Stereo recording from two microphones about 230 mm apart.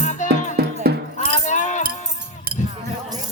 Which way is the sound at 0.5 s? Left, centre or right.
Right.